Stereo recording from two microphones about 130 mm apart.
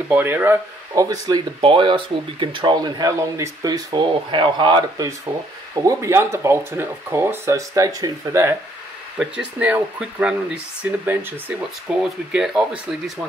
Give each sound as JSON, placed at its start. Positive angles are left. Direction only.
{"t": 0.1, "sound": "speech", "side_deg": -15}
{"t": 0.9, "sound": "speech", "side_deg": -30}
{"t": 1.6, "sound": "speech", "side_deg": -40}
{"t": 5.3, "sound": "speech", "side_deg": -15}
{"t": 9.2, "sound": "speech", "side_deg": -10}